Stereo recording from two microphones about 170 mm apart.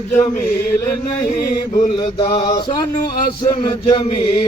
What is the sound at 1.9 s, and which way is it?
Mantra, 30° left (ahead or behind).